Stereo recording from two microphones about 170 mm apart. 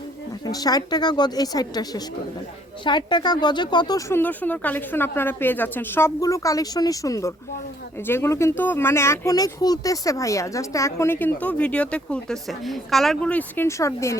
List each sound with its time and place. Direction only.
0.4 s speech: 25° left (ahead or behind)